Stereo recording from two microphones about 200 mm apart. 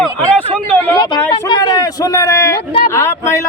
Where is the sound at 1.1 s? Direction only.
10° left (ahead or behind).